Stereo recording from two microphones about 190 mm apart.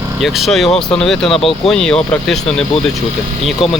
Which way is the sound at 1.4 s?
30° left (ahead or behind).